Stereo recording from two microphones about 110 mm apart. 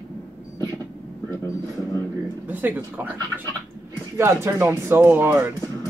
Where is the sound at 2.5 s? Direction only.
15° right (ahead or behind).